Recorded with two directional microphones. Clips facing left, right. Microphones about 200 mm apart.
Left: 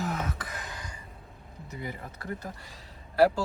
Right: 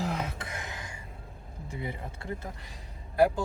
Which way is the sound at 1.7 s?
25° right (ahead or behind).